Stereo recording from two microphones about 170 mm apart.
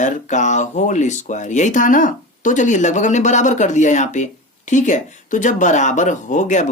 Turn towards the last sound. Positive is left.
turn(degrees=45)  # may be behind; listen again after turning